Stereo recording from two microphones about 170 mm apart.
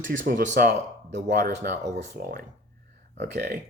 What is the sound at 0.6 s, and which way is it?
Speech, 65° right (ahead or behind).